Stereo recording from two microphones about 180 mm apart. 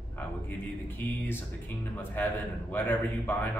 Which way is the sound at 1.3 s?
10° left (ahead or behind).